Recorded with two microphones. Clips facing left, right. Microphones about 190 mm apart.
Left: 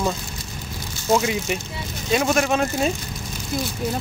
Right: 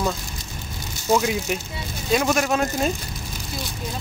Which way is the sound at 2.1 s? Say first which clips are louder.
Left 1 dB; centre (ahead or behind).